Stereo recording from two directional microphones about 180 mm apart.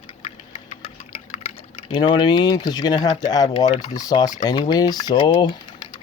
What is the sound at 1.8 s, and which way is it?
Speech, 25° left (ahead or behind).